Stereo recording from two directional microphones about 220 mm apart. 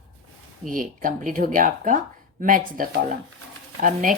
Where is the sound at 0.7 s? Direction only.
40° right (ahead or behind).